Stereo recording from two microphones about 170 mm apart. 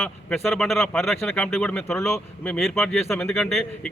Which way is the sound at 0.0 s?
5° left (ahead or behind).